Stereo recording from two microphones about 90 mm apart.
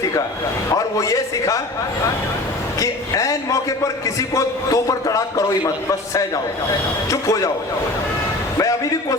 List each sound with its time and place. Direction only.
0.7 s a man's voice: 40° left (ahead or behind)
2.7 s a man's voice: 40° left (ahead or behind)
8.5 s a man's voice: 40° left (ahead or behind)